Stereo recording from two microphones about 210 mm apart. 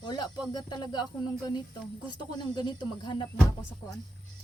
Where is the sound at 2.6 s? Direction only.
20° left (ahead or behind).